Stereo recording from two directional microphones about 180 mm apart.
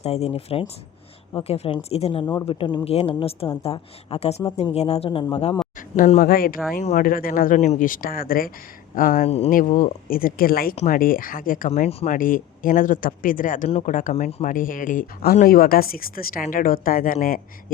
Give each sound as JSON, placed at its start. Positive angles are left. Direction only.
{"t": 0.0, "sound": "a woman's voice", "side_deg": 35}
{"t": 6.0, "sound": "speech", "side_deg": 45}
{"t": 9.2, "sound": "a woman's voice", "side_deg": 35}
{"t": 9.5, "sound": "speech", "side_deg": 50}
{"t": 13.7, "sound": "a woman's voice", "side_deg": 35}
{"t": 14.4, "sound": "speech", "side_deg": 50}